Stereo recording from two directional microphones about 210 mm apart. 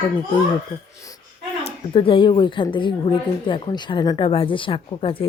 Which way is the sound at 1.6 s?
25° left (ahead or behind).